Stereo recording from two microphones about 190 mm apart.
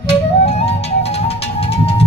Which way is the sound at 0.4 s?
30° left (ahead or behind).